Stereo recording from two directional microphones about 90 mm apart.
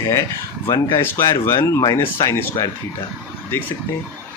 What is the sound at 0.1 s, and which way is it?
Speech, 35° left (ahead or behind).